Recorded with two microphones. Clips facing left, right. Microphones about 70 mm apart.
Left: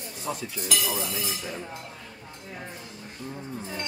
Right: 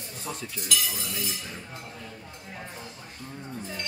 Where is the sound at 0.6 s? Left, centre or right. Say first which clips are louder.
Left 3 dB; left.